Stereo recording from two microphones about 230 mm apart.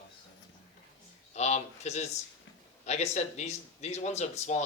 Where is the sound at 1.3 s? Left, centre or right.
Left.